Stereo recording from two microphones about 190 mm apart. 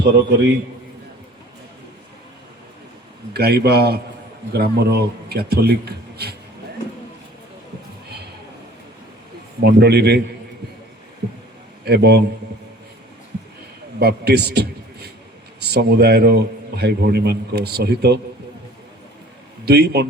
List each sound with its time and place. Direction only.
0.0 s a man's voice: 65° right (ahead or behind)
3.3 s a man's voice: 60° right (ahead or behind)
9.6 s a man's voice: 60° right (ahead or behind)
11.9 s a man's voice: 60° right (ahead or behind)
14.0 s a man's voice: 60° right (ahead or behind)
19.6 s a man's voice: 60° right (ahead or behind)